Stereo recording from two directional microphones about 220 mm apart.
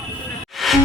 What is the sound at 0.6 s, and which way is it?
Music, centre (ahead or behind).